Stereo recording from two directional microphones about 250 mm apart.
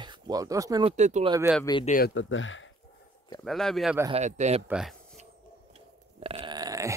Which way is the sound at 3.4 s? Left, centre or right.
Centre.